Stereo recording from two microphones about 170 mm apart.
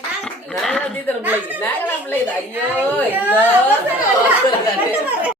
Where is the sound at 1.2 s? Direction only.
10° right (ahead or behind).